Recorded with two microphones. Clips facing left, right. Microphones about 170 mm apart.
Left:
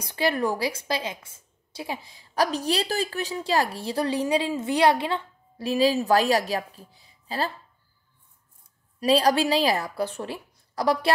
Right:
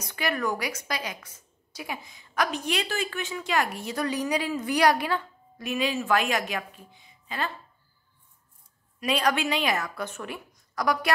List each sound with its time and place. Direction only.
0.0 s a woman's voice: 30° left (ahead or behind)
9.0 s a woman's voice: 35° left (ahead or behind)